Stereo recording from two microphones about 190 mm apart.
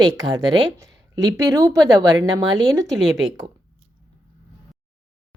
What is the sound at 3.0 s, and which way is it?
Speech, 5° right (ahead or behind).